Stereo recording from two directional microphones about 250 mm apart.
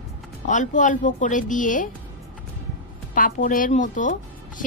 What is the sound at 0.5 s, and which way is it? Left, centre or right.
A woman's voice, left.